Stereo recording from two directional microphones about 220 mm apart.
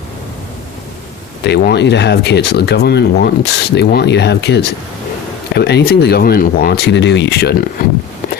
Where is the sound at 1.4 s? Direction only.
50° left (ahead or behind).